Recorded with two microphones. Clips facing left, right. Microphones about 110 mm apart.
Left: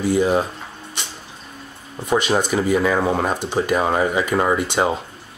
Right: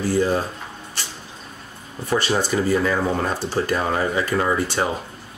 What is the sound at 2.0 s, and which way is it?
Speech, 15° left (ahead or behind).